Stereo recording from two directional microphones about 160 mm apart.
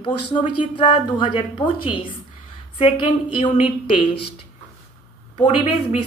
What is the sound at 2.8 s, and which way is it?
Speech, 30° left (ahead or behind).